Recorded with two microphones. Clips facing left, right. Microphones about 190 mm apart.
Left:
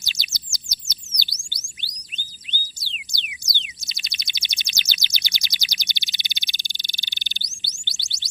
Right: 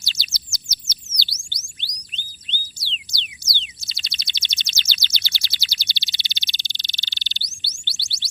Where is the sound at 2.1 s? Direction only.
10° left (ahead or behind).